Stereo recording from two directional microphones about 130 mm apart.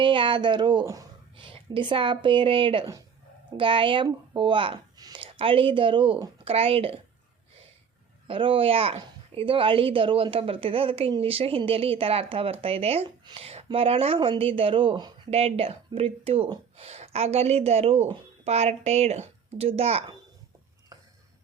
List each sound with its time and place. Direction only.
0.0 s speech: 40° right (ahead or behind)
4.9 s a sound: 30° right (ahead or behind)
5.2 s speech: 45° right (ahead or behind)
6.4 s speech: 45° right (ahead or behind)
8.3 s speech: 40° right (ahead or behind)
13.2 s a sound: 45° right (ahead or behind)
13.7 s speech: 45° right (ahead or behind)
15.3 s speech: 50° right (ahead or behind)